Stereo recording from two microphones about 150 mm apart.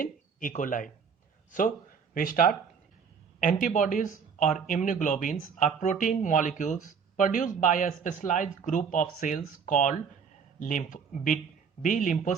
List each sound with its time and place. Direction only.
0.0 s speech: 60° left (ahead or behind)
2.1 s speech: 70° left (ahead or behind)
3.7 s speech: 55° left (ahead or behind)